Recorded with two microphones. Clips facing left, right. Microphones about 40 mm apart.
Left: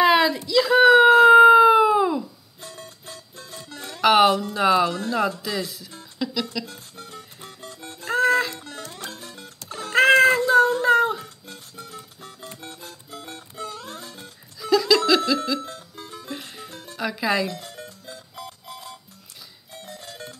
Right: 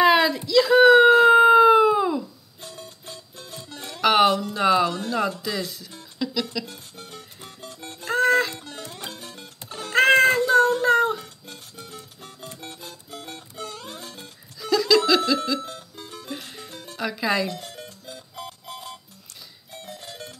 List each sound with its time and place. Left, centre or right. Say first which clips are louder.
0.0 s a sound: even; centre
2.6 s music: even; left
3.7 s music: left 1 dB; centre
4.0 s speech: left 2 dB; centre
6.1 s music: even; centre
8.1 s music: even; centre
8.6 s music: left 1 dB; right
9.9 s music: left 1 dB; centre
12.2 s music: even; left
14.6 s laughter: left 1 dB; centre
15.0 s a sound: even; centre
16.2 s music: even; centre
16.9 s speech: left 1 dB; centre
19.7 s music: right 1 dB; right